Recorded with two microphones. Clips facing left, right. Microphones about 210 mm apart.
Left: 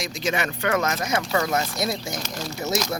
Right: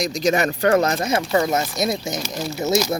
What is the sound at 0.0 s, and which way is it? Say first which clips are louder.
Speech: right 7 dB; 40° right (ahead or behind).